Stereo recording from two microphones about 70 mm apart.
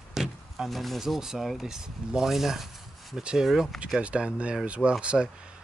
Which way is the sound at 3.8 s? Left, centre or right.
Centre.